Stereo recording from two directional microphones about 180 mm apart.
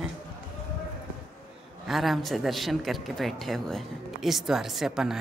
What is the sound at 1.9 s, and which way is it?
Speech, centre (ahead or behind).